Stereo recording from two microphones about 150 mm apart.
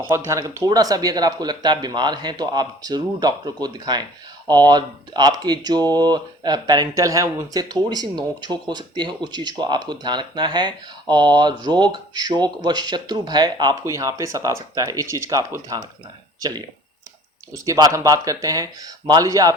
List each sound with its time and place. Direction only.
0.0 s speech: 20° right (ahead or behind)